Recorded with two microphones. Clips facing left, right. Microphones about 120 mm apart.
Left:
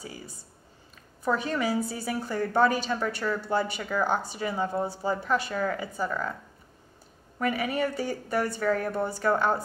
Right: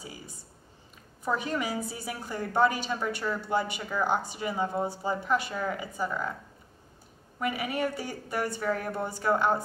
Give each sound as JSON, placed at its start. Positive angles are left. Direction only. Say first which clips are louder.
{"t": 0.0, "sound": "a sound", "louder": "left 3 dB", "side_deg": -15}
{"t": 1.2, "sound": "a woman's voice", "louder": "left 3 dB", "side_deg": -15}
{"t": 7.3, "sound": "a woman's voice", "louder": "left 3 dB", "side_deg": -15}